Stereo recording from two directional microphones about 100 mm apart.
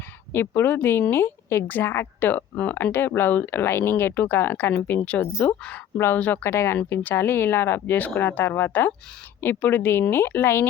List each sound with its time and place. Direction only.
0.3 s speech: 20° left (ahead or behind)